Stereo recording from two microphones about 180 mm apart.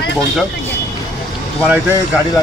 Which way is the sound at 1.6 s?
10° right (ahead or behind).